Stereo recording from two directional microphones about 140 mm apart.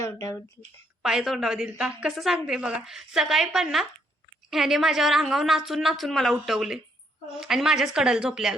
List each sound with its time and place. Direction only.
0.0 s speech: 25° left (ahead or behind)
1.0 s a woman's voice: centre (ahead or behind)